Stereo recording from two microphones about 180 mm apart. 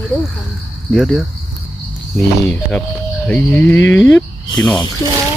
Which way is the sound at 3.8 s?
90° left.